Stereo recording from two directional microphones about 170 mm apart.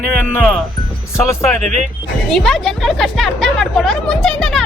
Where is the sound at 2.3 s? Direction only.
Centre (ahead or behind).